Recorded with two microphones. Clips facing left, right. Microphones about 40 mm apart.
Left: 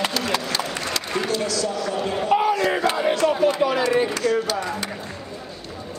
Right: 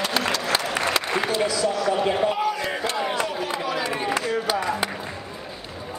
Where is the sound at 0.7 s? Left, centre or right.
Right.